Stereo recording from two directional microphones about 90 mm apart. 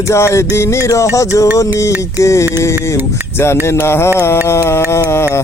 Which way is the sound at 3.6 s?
30° left (ahead or behind).